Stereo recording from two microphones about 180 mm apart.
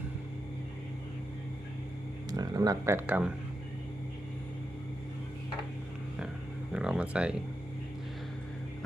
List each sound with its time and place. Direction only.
2.3 s speech: 20° right (ahead or behind)
6.7 s speech: 5° right (ahead or behind)